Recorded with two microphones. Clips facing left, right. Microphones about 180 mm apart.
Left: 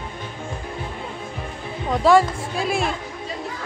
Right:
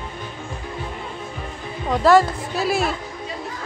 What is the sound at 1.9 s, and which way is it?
A woman's voice, centre (ahead or behind).